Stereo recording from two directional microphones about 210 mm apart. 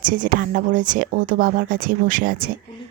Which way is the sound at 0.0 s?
40° right (ahead or behind).